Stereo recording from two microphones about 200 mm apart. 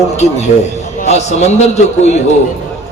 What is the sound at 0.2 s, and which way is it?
A man's voice, 35° left (ahead or behind).